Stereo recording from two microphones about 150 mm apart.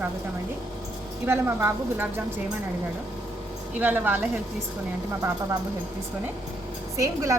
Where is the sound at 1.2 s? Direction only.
15° right (ahead or behind).